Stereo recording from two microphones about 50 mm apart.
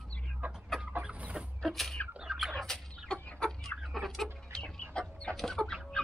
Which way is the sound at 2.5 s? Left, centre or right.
Centre.